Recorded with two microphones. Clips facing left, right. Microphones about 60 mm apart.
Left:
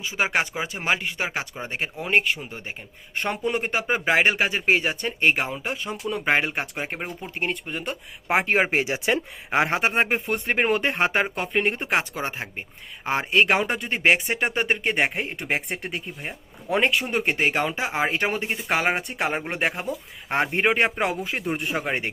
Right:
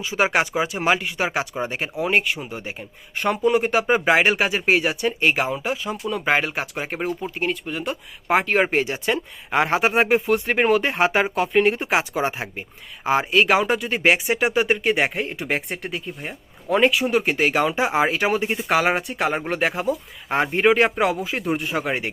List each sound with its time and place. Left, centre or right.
0.1 s speech: right
1.8 s speech: centre
3.8 s speech: centre
8.7 s speech: left
9.5 s speech: centre
17.7 s speech: right
18.2 s speech: centre